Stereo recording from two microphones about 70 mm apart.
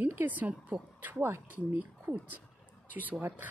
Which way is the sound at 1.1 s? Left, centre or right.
Right.